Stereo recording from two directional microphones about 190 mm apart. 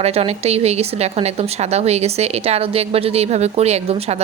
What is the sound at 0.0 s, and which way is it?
Speech, 35° right (ahead or behind).